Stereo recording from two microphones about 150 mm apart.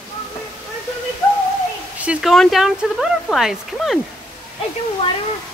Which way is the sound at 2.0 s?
5° right (ahead or behind).